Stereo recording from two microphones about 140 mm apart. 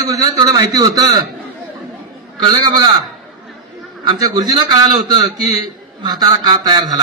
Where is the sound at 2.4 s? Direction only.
30° right (ahead or behind).